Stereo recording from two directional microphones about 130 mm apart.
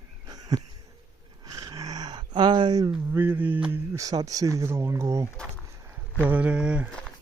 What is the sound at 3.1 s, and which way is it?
Speech, 15° right (ahead or behind).